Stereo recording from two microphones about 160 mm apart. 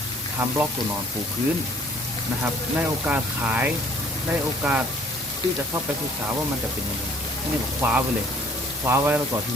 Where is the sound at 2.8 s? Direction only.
10° right (ahead or behind).